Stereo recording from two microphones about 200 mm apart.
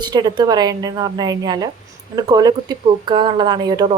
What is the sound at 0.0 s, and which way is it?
Speech, 20° right (ahead or behind).